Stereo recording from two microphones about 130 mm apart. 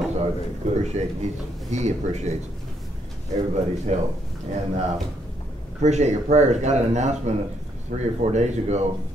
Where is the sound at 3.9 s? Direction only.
60° right (ahead or behind).